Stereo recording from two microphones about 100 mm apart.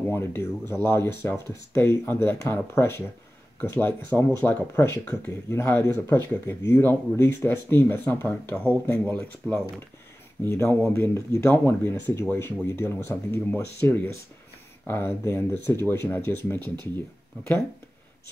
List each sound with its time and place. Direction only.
0.1 s speech: 25° left (ahead or behind)
4.7 s speech: 25° left (ahead or behind)